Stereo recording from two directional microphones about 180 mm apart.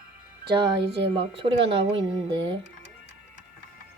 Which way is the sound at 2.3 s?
25° right (ahead or behind).